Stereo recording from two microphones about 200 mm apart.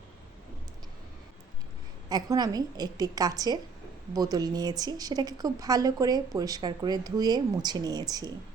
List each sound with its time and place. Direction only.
2.0 s speech: 20° right (ahead or behind)